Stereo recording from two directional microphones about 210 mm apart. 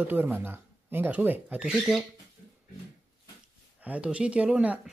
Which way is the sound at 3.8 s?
5° right (ahead or behind).